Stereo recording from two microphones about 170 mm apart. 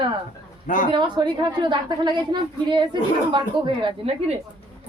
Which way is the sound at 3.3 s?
30° right (ahead or behind).